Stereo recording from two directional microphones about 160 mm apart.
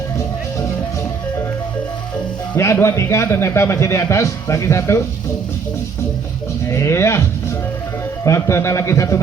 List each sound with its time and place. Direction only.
2.6 s a man's voice: 15° left (ahead or behind)
6.7 s a man's voice: 15° left (ahead or behind)
8.2 s a man's voice: 20° left (ahead or behind)